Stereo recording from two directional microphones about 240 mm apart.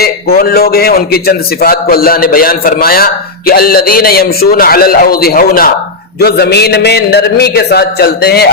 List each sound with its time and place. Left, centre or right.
0.0 s a man's voice: left